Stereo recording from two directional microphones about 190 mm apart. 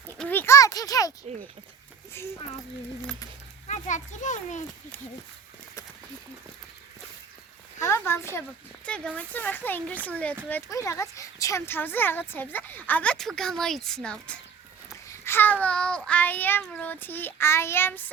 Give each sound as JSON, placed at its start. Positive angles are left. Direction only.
{"t": 0.1, "sound": "a sound", "side_deg": 10}
{"t": 2.1, "sound": "speech", "side_deg": 15}
{"t": 3.7, "sound": "a child's voice", "side_deg": 40}
{"t": 7.8, "sound": "speech", "side_deg": 15}